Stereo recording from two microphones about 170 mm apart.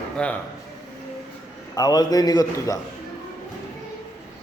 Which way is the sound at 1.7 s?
25° left (ahead or behind).